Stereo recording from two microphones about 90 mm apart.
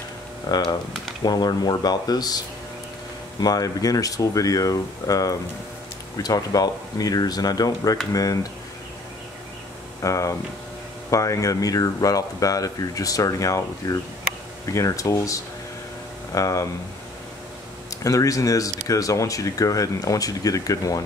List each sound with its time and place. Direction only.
0.5 s speech: 50° left (ahead or behind)
10.0 s speech: 35° left (ahead or behind)
18.0 s speech: 40° left (ahead or behind)